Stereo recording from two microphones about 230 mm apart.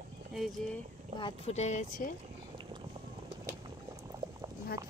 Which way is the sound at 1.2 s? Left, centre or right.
Left.